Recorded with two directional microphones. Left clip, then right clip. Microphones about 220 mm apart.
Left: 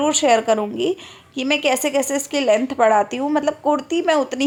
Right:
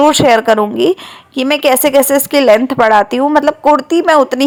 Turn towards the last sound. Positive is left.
turn(degrees=-20)  # may be behind; listen again after turning